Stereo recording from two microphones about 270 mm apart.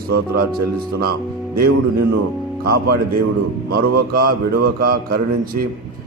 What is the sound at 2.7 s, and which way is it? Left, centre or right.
A man's voice, right.